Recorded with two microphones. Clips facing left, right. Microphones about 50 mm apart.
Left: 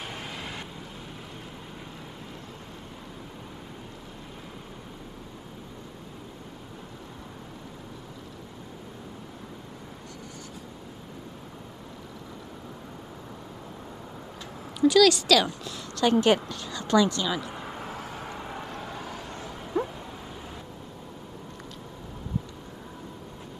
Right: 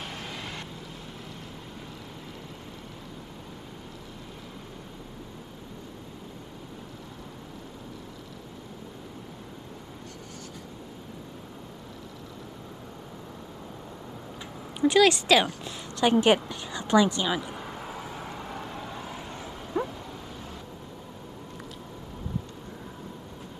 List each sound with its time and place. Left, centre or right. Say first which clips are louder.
0.0 s vehicle: even; centre
14.8 s a woman's voice: left 1 dB; right
17.5 s a sound: left 1 dB; centre
18.7 s vehicle: left 1 dB; centre
19.0 s vehicle: left 1 dB; centre
19.5 s dog: left 1 dB; centre